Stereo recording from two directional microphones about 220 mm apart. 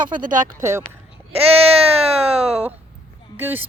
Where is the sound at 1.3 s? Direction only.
25° right (ahead or behind).